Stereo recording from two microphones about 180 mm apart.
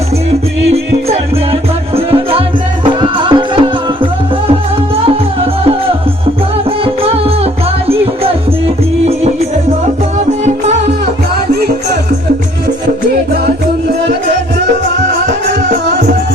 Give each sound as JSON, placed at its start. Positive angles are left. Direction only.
{"t": 2.8, "sound": "music", "side_deg": -25}
{"t": 6.7, "sound": "music", "side_deg": -30}